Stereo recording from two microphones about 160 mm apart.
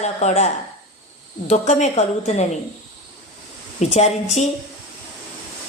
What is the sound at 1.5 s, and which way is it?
Speech, 45° left (ahead or behind).